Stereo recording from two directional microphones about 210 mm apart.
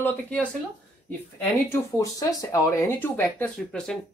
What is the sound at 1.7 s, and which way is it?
Speech, 15° left (ahead or behind).